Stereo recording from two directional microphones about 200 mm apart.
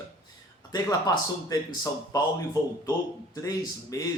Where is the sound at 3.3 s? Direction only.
15° left (ahead or behind).